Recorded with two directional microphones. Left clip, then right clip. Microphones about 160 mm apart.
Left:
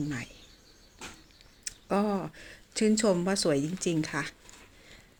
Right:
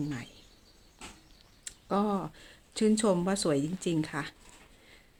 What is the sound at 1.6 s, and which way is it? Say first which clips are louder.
Speech: left 1 dB; 5° right (ahead or behind).